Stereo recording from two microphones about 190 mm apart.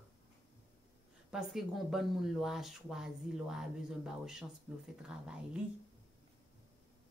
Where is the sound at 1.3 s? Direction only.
Centre (ahead or behind).